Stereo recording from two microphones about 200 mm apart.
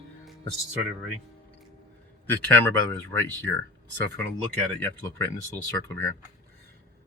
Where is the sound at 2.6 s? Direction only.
10° left (ahead or behind).